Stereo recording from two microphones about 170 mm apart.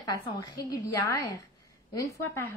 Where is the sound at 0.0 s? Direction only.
20° left (ahead or behind).